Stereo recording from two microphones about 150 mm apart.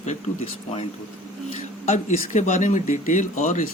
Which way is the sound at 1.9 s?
55° left (ahead or behind).